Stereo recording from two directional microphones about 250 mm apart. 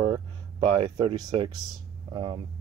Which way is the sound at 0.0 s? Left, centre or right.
Centre.